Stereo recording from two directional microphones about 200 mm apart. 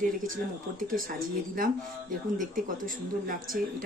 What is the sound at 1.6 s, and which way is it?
A woman's voice, 45° right (ahead or behind).